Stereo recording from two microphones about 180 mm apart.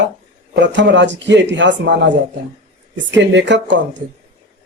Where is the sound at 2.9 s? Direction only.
85° right.